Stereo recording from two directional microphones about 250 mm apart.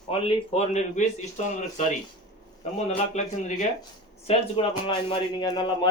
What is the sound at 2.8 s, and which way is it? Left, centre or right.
A man's voice, left.